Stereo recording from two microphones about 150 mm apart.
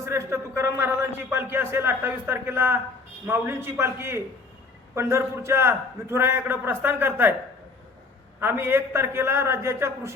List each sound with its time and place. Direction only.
0.0 s a man's voice: 15° right (ahead or behind)
8.4 s a man's voice: 15° right (ahead or behind)